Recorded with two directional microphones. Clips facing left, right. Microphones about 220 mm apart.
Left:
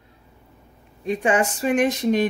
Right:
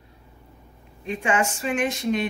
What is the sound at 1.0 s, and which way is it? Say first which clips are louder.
Speech: left 4 dB; 35° left (ahead or behind).